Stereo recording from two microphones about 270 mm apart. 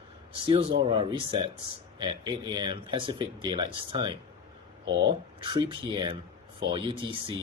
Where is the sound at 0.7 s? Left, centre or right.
Centre.